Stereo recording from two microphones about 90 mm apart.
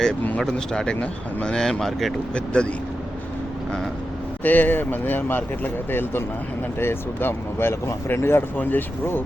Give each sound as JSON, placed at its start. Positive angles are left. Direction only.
{"t": 0.3, "sound": "speech", "side_deg": 10}
{"t": 4.4, "sound": "speech", "side_deg": 20}